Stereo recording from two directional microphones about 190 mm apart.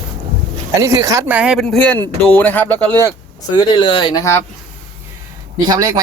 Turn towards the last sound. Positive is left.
turn(degrees=-20)  # may be behind; listen again after turning